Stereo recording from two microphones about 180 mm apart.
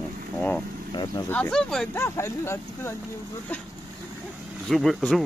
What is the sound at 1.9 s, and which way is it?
Speech, 15° left (ahead or behind).